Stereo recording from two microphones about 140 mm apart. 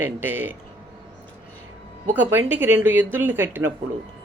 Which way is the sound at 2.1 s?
15° right (ahead or behind).